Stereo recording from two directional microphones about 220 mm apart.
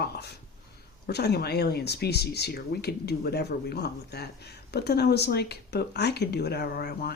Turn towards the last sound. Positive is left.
turn(degrees=45)  # may be behind; listen again after turning